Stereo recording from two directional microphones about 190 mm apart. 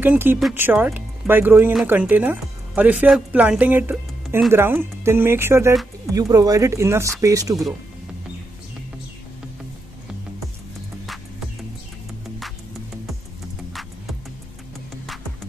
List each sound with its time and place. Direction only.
0.0 s speech: 10° right (ahead or behind)